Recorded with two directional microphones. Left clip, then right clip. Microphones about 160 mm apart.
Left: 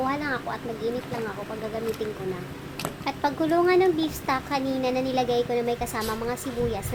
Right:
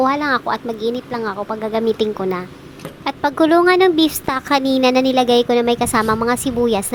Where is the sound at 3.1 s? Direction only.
45° right (ahead or behind).